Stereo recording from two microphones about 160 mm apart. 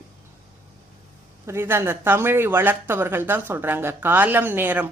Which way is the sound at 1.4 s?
15° right (ahead or behind).